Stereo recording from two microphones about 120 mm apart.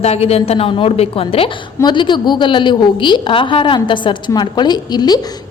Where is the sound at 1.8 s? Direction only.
40° left (ahead or behind).